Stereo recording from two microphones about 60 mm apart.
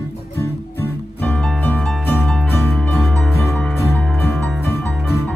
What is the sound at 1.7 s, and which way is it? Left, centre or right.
Music, left.